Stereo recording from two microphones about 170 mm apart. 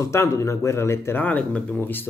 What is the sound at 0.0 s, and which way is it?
Speech, 20° left (ahead or behind).